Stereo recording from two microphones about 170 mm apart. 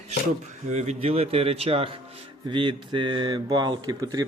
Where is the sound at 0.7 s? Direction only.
40° right (ahead or behind).